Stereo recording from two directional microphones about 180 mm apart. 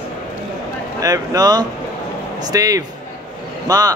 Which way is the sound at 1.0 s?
20° right (ahead or behind).